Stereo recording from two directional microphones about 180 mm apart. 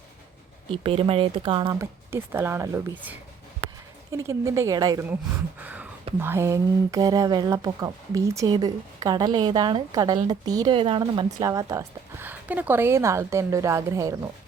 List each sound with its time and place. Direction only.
0.7 s speech: 30° right (ahead or behind)
1.8 s speech: 15° right (ahead or behind)
4.1 s speech: 15° right (ahead or behind)
5.6 s a sound: 10° right (ahead or behind)
6.1 s speech: 15° right (ahead or behind)